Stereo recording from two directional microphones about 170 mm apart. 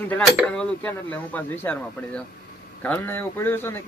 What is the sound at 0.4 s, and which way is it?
Speech, 5° left (ahead or behind).